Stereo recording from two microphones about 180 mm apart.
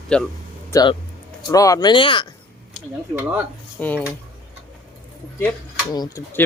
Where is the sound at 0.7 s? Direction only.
25° left (ahead or behind).